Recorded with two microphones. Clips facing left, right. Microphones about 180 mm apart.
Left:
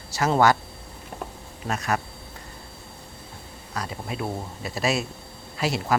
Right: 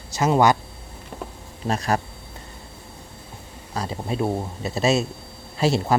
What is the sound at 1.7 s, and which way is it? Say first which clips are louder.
Speech: right 4 dB; 35° right (ahead or behind).